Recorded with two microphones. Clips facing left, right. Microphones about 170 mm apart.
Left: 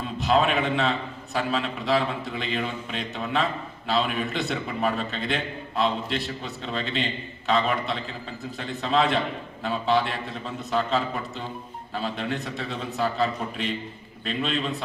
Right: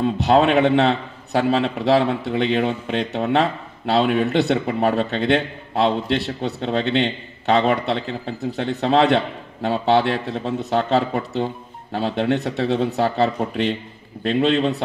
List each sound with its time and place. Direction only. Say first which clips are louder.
0.0 s a man's voice: right 7 dB; 70° right (ahead or behind)